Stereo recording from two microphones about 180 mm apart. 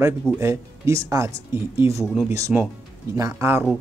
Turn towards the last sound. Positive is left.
turn(degrees=-15)  # may be behind; listen again after turning